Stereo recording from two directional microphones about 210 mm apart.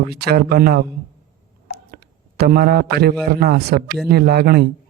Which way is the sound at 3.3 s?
45° right (ahead or behind).